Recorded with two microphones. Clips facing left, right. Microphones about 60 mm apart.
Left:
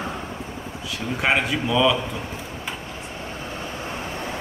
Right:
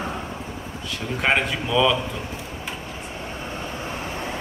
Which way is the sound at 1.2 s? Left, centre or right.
Centre.